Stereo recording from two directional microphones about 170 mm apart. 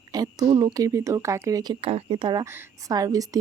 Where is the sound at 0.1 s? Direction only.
25° right (ahead or behind).